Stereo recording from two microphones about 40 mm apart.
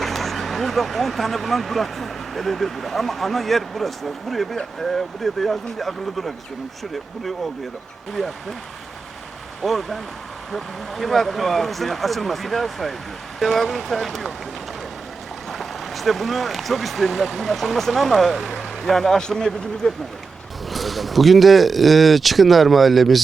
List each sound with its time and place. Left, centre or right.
0.0 s speech: centre
9.6 s speech: centre
15.4 s speech: centre
20.7 s speech: centre